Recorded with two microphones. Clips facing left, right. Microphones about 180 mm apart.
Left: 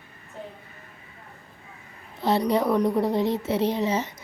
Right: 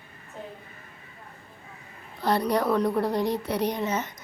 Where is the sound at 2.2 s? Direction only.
25° left (ahead or behind).